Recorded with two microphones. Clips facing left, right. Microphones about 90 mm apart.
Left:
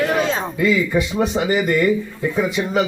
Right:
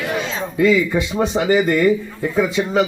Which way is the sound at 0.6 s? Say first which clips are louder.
Right 4 dB; 30° right (ahead or behind).